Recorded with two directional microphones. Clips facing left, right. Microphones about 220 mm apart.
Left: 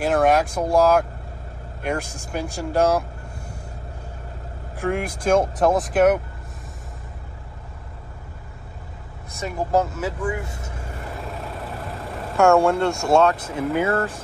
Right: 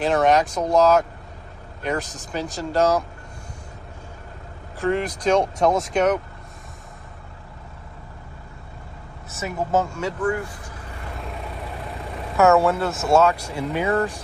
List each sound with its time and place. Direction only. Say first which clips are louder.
0.0 s speech: even; 5° left (ahead or behind)
4.7 s speech: right 2 dB; 10° left (ahead or behind)
9.3 s speech: left 1 dB; 5° right (ahead or behind)
10.2 s speech: right 3 dB; 25° left (ahead or behind)
12.4 s speech: left 1 dB; centre (ahead or behind)
13.8 s speech: right 1 dB; 15° right (ahead or behind)